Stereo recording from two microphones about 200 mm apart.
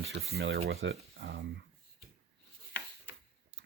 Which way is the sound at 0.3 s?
55° right (ahead or behind).